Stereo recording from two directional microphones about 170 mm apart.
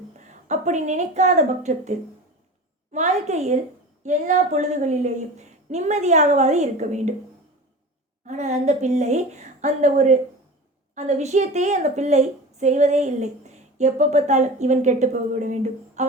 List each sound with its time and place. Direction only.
0.4 s a woman's voice: 45° right (ahead or behind)
8.3 s a woman's voice: 45° right (ahead or behind)